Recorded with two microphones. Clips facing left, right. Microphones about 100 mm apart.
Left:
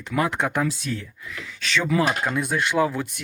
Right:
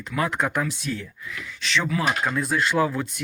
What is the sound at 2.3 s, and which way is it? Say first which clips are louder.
Speech: even; 20° left (ahead or behind).